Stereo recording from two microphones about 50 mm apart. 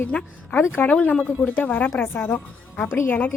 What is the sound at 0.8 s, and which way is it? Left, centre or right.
Speech, left.